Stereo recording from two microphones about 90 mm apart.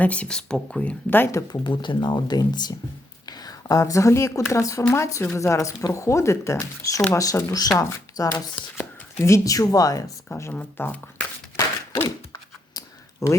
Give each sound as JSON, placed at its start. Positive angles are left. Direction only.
{"t": 0.0, "sound": "speech", "side_deg": 15}
{"t": 1.6, "sound": "speech", "side_deg": 65}
{"t": 10.5, "sound": "speech", "side_deg": 20}
{"t": 12.0, "sound": "a sound", "side_deg": 40}